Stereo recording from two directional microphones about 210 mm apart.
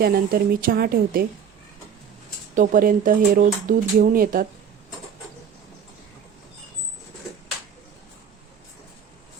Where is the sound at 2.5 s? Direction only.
40° right (ahead or behind).